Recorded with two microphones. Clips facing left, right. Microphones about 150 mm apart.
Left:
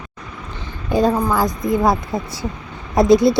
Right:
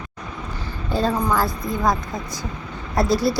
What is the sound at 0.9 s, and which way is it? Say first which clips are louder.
Speech: left 4 dB; 15° left (ahead or behind).